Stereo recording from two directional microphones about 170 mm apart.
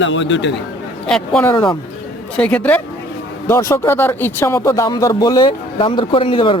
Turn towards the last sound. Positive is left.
turn(degrees=30)  # may be behind; listen again after turning